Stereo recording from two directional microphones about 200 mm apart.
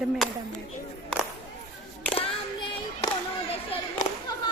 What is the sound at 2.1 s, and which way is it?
Child singing, 30° left (ahead or behind).